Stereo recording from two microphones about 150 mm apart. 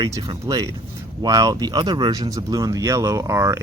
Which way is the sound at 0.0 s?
25° right (ahead or behind).